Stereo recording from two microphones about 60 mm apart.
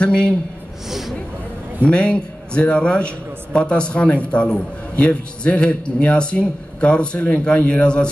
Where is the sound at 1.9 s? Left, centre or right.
Centre.